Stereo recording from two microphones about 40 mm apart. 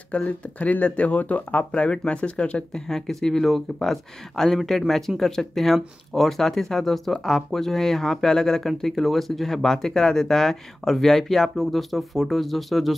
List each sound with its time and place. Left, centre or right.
0.1 s speech: left
2.7 s speech: centre